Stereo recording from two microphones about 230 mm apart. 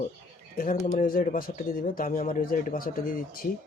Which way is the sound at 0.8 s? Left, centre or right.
Left.